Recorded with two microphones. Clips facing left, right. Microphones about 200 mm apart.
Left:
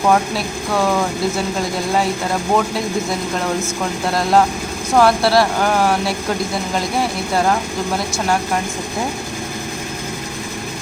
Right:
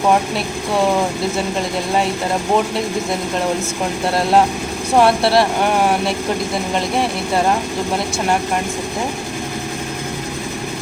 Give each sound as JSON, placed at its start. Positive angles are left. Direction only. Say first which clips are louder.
{"t": 4.9, "sound": "speech", "louder": "even", "side_deg": -25}